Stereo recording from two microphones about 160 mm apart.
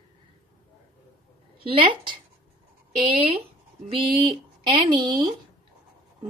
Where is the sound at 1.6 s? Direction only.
30° right (ahead or behind).